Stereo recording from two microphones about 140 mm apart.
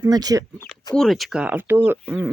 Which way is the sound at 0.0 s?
25° right (ahead or behind).